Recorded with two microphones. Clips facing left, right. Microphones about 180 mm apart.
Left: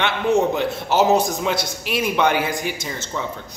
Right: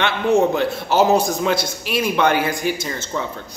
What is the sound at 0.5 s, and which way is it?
A man's voice, 20° left (ahead or behind).